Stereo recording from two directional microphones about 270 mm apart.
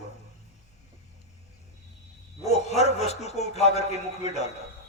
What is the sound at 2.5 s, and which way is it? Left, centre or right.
A man's voice, left.